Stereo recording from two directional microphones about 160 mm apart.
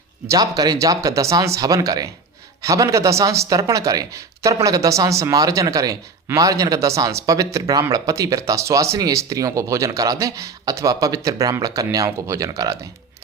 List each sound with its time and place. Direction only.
0.3 s speech: 25° right (ahead or behind)